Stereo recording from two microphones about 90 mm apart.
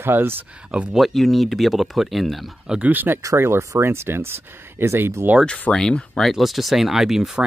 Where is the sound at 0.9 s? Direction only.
Centre (ahead or behind).